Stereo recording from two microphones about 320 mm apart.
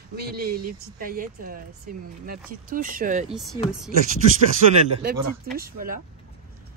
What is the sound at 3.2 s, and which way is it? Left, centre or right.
Speech, centre.